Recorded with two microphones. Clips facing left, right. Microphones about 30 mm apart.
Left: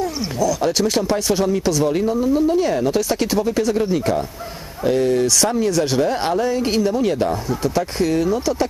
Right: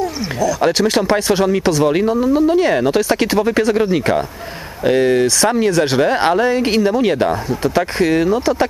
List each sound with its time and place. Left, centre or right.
0.0 s a sound: centre
0.6 s speech: right
5.7 s speech: right